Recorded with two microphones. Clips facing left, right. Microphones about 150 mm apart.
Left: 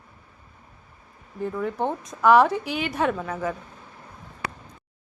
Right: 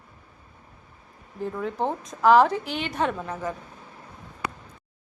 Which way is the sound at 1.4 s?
Centre (ahead or behind).